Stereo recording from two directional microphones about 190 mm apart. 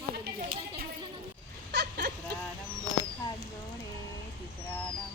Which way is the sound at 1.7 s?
60° right (ahead or behind).